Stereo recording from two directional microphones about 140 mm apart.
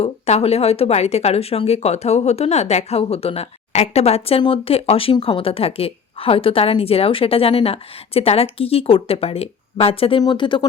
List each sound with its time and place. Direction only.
0.0 s speech: 50° left (ahead or behind)